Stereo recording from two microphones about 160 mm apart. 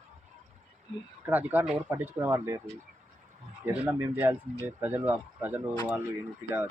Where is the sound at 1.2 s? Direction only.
10° right (ahead or behind).